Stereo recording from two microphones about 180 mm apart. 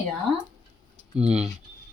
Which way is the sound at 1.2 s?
5° right (ahead or behind).